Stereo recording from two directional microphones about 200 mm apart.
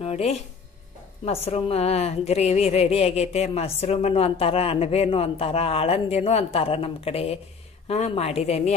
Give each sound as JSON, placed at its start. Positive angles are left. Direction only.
{"t": 0.0, "sound": "a woman's voice", "side_deg": 30}